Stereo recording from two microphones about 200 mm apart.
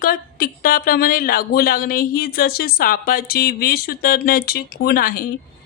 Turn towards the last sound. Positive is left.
turn(degrees=45)  # may be behind; listen again after turning